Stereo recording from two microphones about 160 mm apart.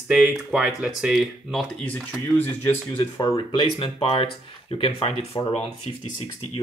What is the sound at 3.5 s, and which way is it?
Speech, 35° left (ahead or behind).